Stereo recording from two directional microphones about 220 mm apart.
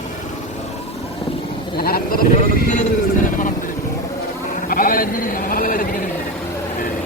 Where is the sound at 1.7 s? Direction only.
45° left (ahead or behind).